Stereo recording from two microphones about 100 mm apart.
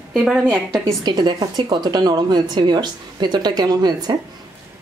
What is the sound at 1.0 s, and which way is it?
A woman's voice, 45° right (ahead or behind).